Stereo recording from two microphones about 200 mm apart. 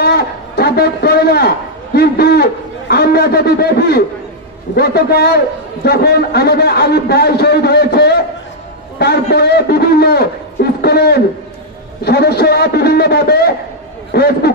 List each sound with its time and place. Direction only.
0.0 s a man's voice: 50° left (ahead or behind)